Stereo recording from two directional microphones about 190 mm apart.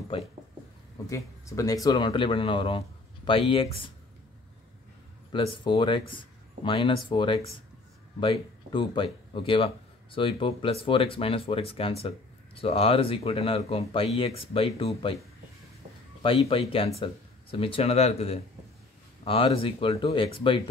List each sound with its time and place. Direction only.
1.0 s speech: 15° left (ahead or behind)
5.3 s speech: 25° left (ahead or behind)
16.2 s speech: 30° left (ahead or behind)